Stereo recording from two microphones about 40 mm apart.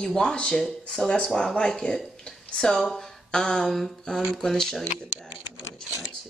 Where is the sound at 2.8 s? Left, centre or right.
Centre.